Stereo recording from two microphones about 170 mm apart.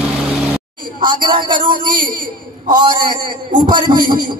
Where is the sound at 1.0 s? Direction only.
25° right (ahead or behind).